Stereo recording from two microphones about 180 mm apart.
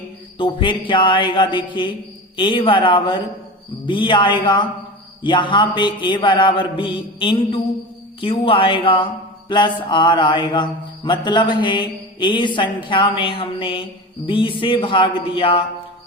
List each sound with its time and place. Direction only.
0.3 s mantra: 25° left (ahead or behind)